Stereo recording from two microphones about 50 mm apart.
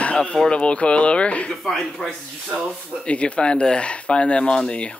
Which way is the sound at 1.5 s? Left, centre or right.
Centre.